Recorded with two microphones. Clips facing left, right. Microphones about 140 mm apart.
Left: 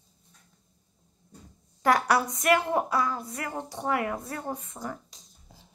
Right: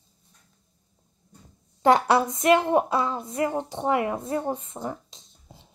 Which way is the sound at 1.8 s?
25° right (ahead or behind).